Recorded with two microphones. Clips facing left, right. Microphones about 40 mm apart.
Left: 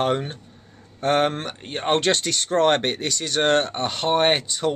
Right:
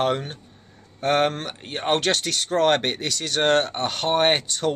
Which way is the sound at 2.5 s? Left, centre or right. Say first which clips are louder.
Left 1 dB; centre.